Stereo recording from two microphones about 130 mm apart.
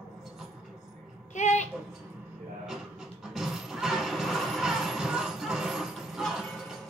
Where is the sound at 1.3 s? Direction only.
65° left (ahead or behind).